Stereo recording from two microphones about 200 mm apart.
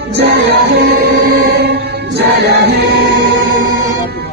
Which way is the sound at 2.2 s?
55° right (ahead or behind).